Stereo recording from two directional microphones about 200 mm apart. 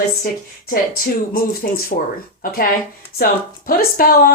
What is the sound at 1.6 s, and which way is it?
Speech, 45° left (ahead or behind).